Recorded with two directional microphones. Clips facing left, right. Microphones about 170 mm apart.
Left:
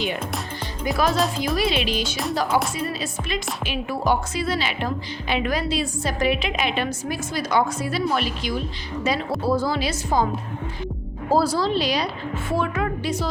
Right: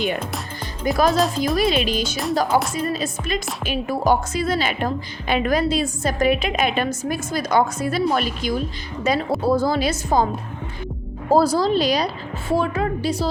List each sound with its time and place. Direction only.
0.9 s a woman's voice: 45° right (ahead or behind)
11.3 s a woman's voice: 45° right (ahead or behind)